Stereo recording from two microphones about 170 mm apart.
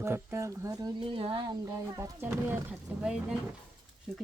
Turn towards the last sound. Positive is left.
turn(degrees=-5)  # may be behind; listen again after turning